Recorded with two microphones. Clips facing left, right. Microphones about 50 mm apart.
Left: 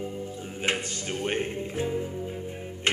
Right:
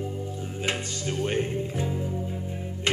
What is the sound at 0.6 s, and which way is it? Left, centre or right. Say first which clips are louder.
Music: left 1 dB; left.